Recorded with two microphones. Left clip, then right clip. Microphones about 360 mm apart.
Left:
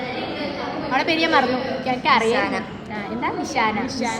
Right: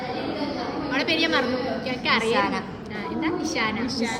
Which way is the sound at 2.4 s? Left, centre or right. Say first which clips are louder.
Left 1 dB; centre.